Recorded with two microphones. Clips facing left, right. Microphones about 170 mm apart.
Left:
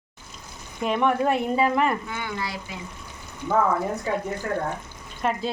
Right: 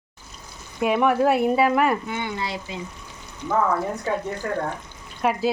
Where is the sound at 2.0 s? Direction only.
25° right (ahead or behind).